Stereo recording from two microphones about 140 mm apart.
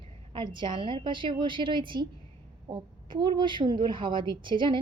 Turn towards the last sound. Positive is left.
turn(degrees=-35)  # may be behind; listen again after turning